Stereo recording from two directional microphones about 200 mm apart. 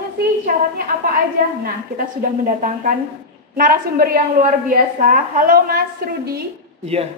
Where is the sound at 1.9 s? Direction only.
40° right (ahead or behind).